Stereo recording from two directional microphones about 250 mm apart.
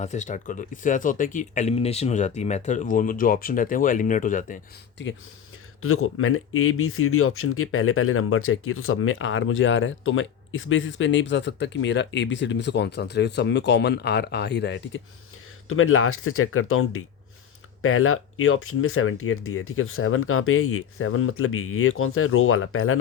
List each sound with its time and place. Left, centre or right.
0.0 s speech: left
5.8 s speech: left
15.7 s speech: left